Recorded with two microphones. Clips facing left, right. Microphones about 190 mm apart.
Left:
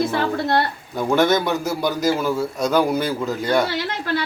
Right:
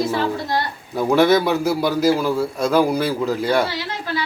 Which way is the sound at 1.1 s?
Centre (ahead or behind).